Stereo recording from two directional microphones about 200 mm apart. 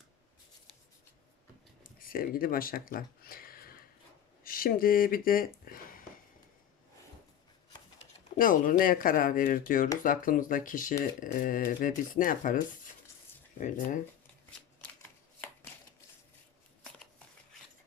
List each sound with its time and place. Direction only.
2.0 s speech: 45° left (ahead or behind)
8.4 s speech: 45° left (ahead or behind)